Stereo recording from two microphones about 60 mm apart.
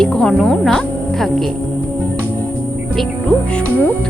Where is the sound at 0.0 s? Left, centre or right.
Centre.